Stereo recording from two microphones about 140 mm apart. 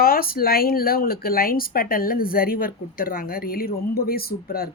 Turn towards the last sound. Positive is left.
turn(degrees=90)